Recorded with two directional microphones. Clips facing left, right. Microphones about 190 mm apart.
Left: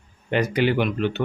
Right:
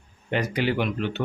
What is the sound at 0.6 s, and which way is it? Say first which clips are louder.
Speech: left 4 dB; 60° left (ahead or behind).